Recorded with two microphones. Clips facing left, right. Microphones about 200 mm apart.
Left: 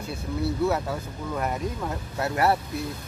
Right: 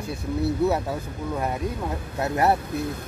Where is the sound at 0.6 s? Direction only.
20° right (ahead or behind).